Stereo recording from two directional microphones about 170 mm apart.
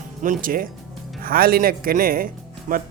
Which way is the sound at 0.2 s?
50° right (ahead or behind).